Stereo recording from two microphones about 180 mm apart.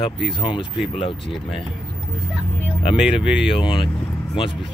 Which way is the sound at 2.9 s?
5° right (ahead or behind).